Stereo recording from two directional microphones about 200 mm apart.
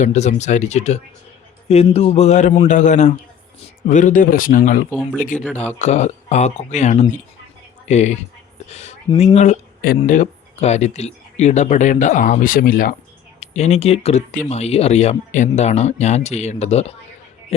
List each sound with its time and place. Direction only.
0.0 s speech: 35° left (ahead or behind)
4.9 s speech: 10° left (ahead or behind)
5.5 s speech: 35° left (ahead or behind)
13.4 s speech: 35° left (ahead or behind)